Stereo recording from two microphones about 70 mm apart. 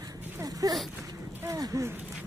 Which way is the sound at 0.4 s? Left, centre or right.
Right.